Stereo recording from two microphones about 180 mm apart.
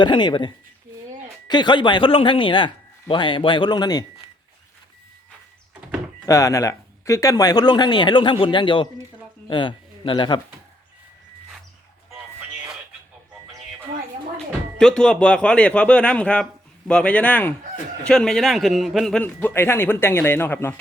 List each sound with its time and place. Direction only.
0.0 s speech: 25° left (ahead or behind)
6.2 s speech: 15° left (ahead or behind)
14.3 s a man's voice: 5° left (ahead or behind)